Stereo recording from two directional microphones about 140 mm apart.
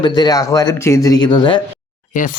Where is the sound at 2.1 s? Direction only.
65° left (ahead or behind).